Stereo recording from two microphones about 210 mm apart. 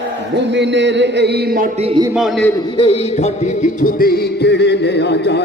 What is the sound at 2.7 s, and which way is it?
Music, 25° left (ahead or behind).